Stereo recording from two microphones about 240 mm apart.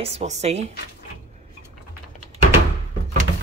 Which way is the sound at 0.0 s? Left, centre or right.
Right.